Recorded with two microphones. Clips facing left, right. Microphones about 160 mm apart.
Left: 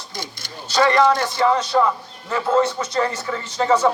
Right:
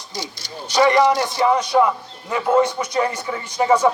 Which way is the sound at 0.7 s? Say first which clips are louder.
Right 1 dB; 15° right (ahead or behind).